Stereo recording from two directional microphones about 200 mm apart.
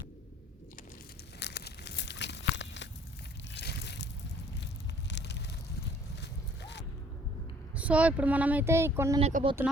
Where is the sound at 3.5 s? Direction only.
55° left (ahead or behind).